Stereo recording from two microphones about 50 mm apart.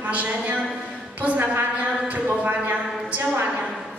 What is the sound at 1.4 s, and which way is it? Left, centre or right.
Speech, right.